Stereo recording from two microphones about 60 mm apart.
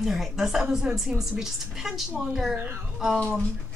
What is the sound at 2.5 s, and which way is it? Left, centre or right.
Speech, right.